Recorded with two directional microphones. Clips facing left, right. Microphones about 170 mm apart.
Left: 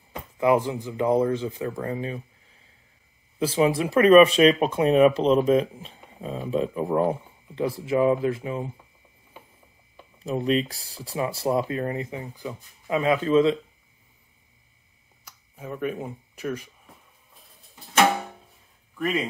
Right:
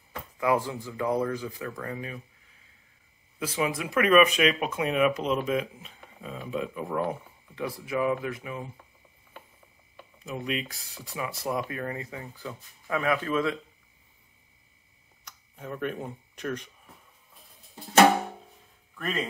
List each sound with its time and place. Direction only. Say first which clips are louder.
0.1 s speech: left 5 dB; 20° left (ahead or behind)
3.3 s speech: left 8 dB; 30° left (ahead or behind)
10.1 s speech: left 9 dB; 35° left (ahead or behind)
15.2 s speech: left 2 dB; 5° left (ahead or behind)
18.9 s speech: left 5 dB; 10° left (ahead or behind)